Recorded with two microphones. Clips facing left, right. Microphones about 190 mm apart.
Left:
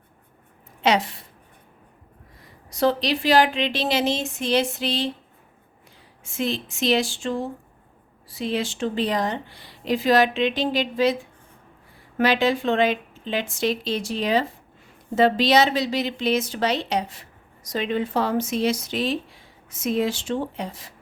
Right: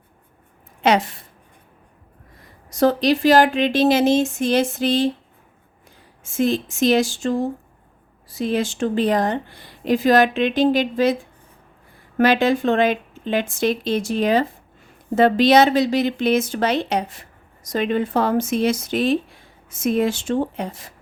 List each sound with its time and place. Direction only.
0.8 s a woman's voice: 50° right (ahead or behind)
2.6 s a woman's voice: 45° right (ahead or behind)
6.2 s a woman's voice: 45° right (ahead or behind)